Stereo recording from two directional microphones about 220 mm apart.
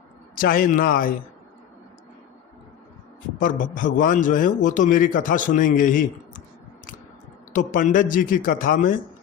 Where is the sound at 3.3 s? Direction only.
35° left (ahead or behind).